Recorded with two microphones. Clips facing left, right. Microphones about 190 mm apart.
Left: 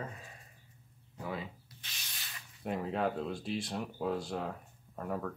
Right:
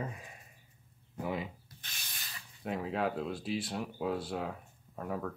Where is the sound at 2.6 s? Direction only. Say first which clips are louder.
Even; centre (ahead or behind).